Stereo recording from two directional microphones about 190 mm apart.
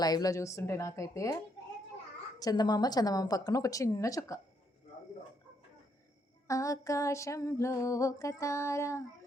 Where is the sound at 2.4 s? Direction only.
20° left (ahead or behind).